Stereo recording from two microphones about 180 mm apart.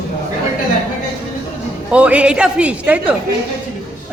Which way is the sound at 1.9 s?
5° right (ahead or behind).